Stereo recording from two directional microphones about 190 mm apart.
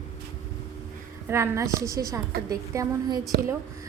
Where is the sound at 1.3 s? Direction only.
15° right (ahead or behind).